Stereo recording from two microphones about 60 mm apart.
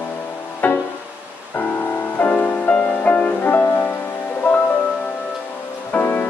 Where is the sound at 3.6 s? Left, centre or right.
Left.